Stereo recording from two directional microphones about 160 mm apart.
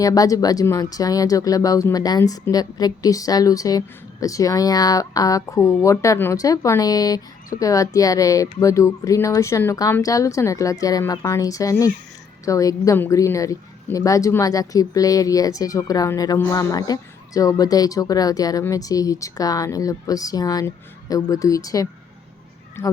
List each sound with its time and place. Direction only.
0.0 s speech: 20° left (ahead or behind)